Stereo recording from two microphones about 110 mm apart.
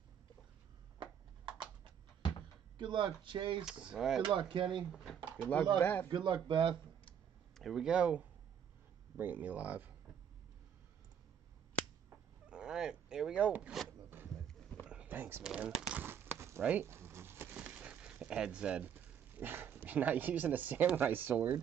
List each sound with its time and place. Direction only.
2.8 s speech: 45° right (ahead or behind)
3.9 s speech: 5° right (ahead or behind)
4.2 s speech: 50° right (ahead or behind)
4.9 s speech: centre (ahead or behind)
5.8 s a man's voice: 15° left (ahead or behind)
6.0 s speech: 45° right (ahead or behind)
7.5 s speech: centre (ahead or behind)
12.4 s dog: 10° right (ahead or behind)
14.9 s a sound: 15° right (ahead or behind)
15.4 s pigeon: 10° right (ahead or behind)
16.8 s a sound: 25° right (ahead or behind)
17.6 s a sound: 10° right (ahead or behind)